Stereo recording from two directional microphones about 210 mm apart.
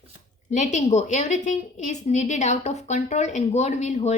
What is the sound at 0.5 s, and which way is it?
A woman's voice, 35° left (ahead or behind).